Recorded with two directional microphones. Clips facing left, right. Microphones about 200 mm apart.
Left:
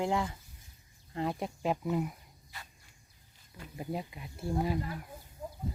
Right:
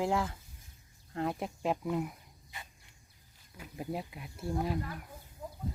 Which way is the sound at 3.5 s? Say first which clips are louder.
Even; centre (ahead or behind).